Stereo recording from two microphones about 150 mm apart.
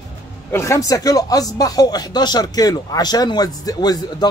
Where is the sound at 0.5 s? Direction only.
20° left (ahead or behind).